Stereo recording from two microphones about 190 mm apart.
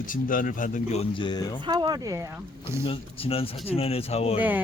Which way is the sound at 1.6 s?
20° right (ahead or behind).